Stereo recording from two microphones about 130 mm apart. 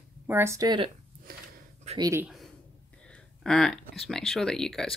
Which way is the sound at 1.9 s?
55° right (ahead or behind).